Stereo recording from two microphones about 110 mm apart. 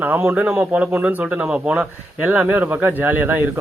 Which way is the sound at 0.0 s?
15° right (ahead or behind).